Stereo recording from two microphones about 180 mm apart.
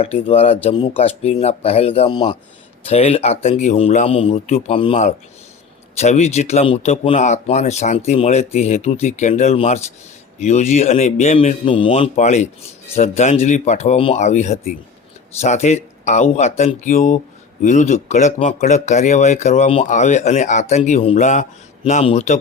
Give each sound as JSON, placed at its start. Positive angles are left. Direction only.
{"t": 0.0, "sound": "speech", "side_deg": 35}